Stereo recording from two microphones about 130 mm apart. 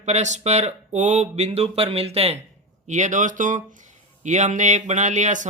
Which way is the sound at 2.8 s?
65° right (ahead or behind).